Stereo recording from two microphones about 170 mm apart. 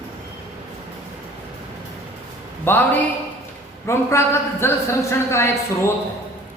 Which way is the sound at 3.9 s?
15° left (ahead or behind).